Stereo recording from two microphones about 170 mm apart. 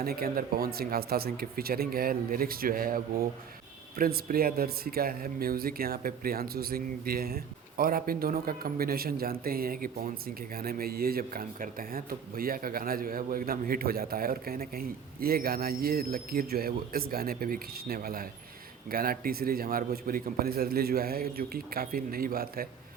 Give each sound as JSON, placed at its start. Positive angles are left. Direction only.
{"t": 0.0, "sound": "speech", "side_deg": -60}